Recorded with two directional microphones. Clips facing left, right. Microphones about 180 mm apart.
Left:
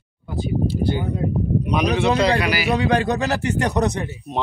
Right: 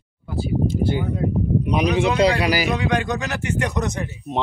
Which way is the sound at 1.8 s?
35° left (ahead or behind).